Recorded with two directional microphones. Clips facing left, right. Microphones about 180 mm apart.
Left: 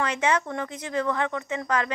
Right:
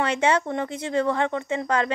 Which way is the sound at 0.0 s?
30° right (ahead or behind).